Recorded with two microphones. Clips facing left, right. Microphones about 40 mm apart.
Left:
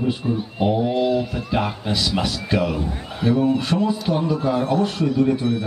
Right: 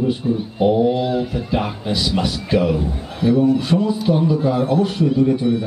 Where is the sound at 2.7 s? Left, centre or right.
Centre.